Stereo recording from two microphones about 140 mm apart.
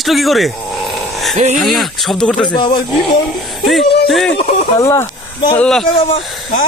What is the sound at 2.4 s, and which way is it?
Speech, 30° left (ahead or behind).